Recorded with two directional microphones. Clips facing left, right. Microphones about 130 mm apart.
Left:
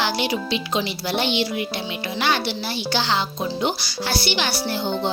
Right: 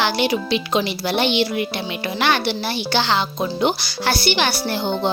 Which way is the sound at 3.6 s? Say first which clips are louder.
Right 7 dB; 60° right (ahead or behind).